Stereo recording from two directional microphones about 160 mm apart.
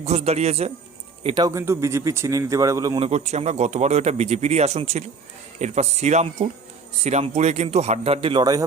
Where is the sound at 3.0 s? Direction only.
40° right (ahead or behind).